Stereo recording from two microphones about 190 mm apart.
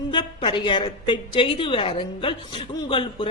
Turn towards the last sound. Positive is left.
turn(degrees=25)  # may be behind; listen again after turning